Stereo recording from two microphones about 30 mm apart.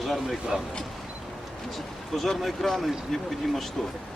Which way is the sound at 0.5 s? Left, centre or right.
Centre.